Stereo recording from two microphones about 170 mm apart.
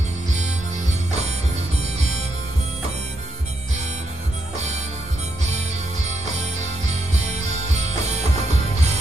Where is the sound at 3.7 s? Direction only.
40° right (ahead or behind).